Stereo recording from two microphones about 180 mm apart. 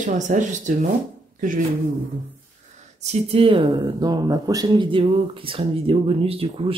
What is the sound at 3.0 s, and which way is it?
Speech, 35° right (ahead or behind).